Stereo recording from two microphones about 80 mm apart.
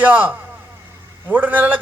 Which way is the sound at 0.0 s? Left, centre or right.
Right.